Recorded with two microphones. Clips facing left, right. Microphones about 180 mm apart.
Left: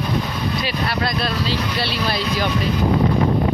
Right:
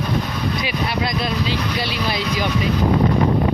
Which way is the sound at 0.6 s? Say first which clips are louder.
Even; 15° right (ahead or behind).